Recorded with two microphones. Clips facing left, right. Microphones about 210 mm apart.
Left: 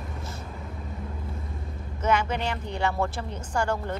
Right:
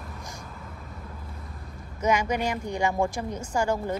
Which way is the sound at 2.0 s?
10° right (ahead or behind).